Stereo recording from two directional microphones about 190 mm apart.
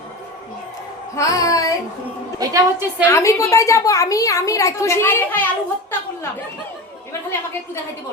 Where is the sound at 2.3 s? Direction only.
15° right (ahead or behind).